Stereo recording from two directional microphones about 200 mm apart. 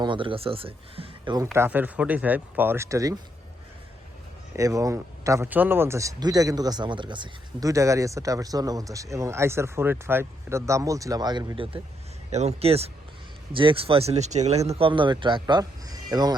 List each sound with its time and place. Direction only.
0.0 s speech: 25° right (ahead or behind)
1.5 s speech: 10° right (ahead or behind)
4.5 s speech: 15° right (ahead or behind)